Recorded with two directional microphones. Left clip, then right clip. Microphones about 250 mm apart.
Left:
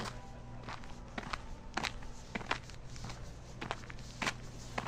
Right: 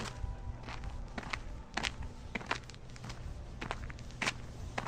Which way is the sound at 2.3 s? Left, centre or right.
Centre.